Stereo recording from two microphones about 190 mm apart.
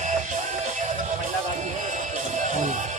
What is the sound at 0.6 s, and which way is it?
Music, 35° right (ahead or behind).